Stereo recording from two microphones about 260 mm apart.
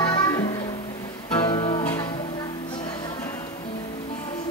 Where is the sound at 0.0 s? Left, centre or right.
Centre.